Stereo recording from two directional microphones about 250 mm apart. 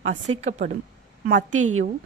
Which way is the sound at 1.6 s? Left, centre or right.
Right.